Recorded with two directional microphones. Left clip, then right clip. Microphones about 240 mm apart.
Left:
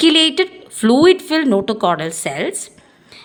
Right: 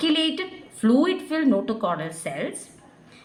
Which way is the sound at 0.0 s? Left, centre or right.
Left.